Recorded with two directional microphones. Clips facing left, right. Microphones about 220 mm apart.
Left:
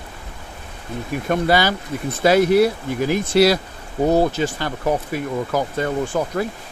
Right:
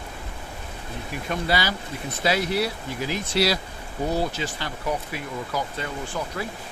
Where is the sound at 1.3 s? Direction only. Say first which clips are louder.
Left 8 dB; 50° left (ahead or behind).